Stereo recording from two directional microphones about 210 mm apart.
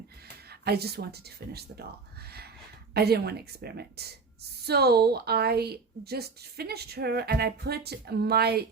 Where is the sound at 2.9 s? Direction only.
50° right (ahead or behind).